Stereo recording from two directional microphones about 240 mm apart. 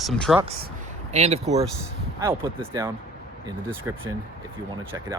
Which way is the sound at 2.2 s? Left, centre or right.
Centre.